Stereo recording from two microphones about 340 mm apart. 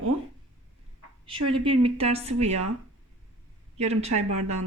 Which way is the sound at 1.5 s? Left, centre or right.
Centre.